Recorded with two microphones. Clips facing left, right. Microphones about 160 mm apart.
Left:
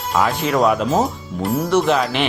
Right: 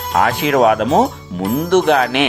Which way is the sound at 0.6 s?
65° right (ahead or behind).